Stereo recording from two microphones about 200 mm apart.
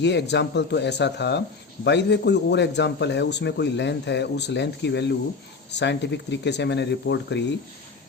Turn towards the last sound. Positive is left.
turn(degrees=60)  # may be behind; listen again after turning